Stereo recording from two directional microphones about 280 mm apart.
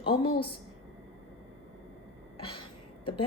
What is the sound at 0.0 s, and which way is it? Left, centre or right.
Speech, centre.